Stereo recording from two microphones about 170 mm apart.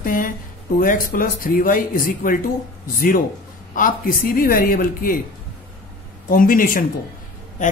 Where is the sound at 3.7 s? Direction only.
55° left (ahead or behind).